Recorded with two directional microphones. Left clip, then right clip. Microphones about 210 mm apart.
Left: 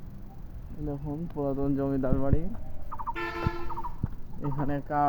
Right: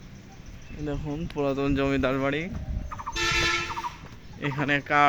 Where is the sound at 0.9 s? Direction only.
40° right (ahead or behind).